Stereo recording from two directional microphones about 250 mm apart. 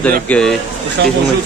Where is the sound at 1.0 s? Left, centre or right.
Right.